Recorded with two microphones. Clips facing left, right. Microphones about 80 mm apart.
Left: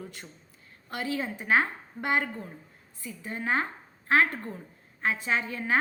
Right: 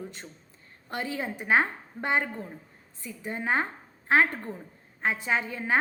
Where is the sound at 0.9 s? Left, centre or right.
Right.